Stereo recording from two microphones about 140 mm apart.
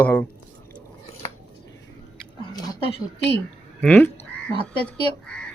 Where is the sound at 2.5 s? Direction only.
30° left (ahead or behind).